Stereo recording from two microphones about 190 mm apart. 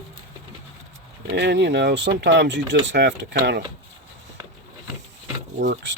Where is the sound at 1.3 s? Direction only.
60° right (ahead or behind).